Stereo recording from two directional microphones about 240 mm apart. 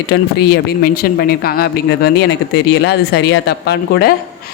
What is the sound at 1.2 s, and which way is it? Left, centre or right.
Speech, left.